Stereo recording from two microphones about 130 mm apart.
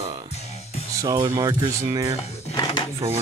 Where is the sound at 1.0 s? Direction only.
25° right (ahead or behind).